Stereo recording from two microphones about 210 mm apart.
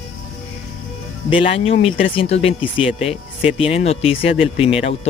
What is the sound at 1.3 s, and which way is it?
Speech, 25° left (ahead or behind).